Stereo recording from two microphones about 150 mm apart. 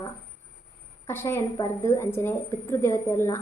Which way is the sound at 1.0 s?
15° left (ahead or behind).